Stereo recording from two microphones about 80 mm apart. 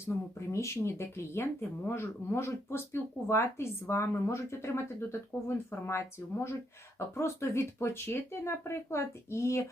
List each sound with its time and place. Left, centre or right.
0.0 s speech: left